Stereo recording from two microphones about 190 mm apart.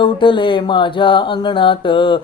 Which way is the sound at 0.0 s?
25° left (ahead or behind).